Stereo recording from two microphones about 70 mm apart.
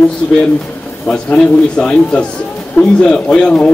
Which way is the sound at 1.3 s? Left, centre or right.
Centre.